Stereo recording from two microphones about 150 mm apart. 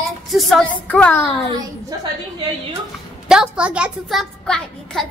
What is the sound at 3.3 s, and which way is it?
Speech, 5° right (ahead or behind).